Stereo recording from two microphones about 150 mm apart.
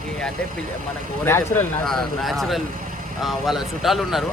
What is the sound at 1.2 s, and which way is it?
Speech, 15° left (ahead or behind).